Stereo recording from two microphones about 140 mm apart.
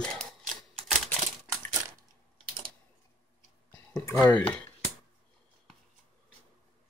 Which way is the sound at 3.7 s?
15° left (ahead or behind).